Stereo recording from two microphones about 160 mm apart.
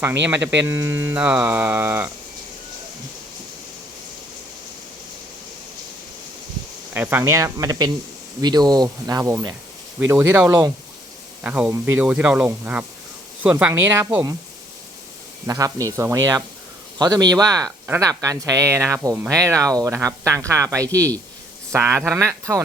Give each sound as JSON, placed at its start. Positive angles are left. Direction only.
{"t": 0.0, "sound": "speech", "side_deg": -10}
{"t": 6.9, "sound": "speech", "side_deg": -10}
{"t": 15.4, "sound": "speech", "side_deg": -20}